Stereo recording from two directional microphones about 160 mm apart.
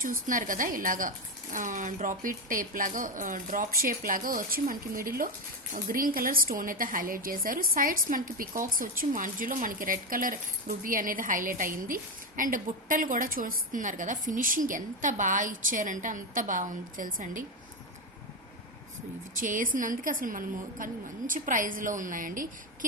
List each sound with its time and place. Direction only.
0.0 s a woman's voice: 60° right (ahead or behind)
19.4 s a woman's voice: 55° right (ahead or behind)